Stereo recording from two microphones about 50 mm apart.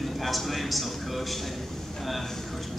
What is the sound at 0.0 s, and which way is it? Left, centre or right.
A man's voice, centre.